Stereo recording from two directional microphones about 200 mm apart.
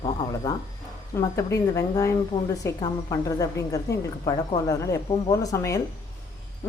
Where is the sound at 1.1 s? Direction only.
15° left (ahead or behind).